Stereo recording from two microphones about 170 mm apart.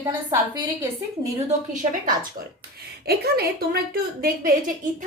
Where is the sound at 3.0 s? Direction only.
65° right (ahead or behind).